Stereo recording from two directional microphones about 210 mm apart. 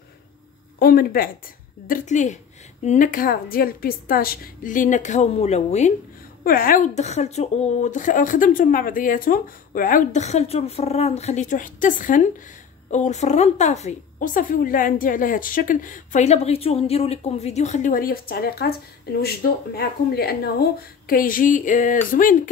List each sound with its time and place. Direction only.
0.7 s speech: 45° left (ahead or behind)